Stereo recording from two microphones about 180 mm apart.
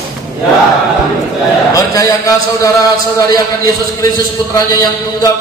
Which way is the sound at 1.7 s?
20° left (ahead or behind).